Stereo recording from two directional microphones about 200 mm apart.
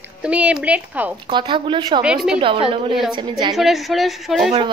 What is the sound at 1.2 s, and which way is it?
Speech, 25° right (ahead or behind).